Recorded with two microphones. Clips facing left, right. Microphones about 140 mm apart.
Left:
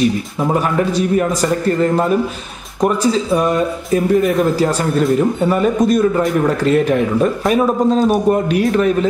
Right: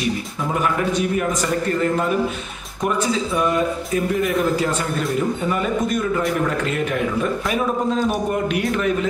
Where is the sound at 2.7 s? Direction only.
35° left (ahead or behind).